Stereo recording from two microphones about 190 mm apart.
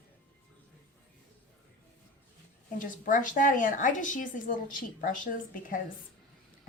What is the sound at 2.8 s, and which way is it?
A woman's voice, 45° left (ahead or behind).